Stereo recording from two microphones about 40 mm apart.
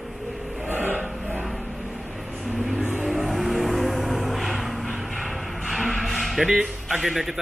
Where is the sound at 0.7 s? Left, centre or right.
Right.